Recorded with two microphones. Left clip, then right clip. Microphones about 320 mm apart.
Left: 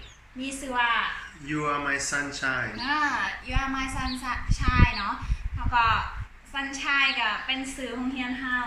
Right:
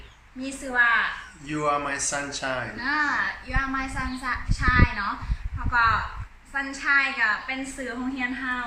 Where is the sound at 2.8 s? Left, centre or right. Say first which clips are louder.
Right 2 dB; centre.